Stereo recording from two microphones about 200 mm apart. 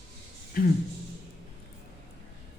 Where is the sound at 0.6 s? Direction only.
45° left (ahead or behind).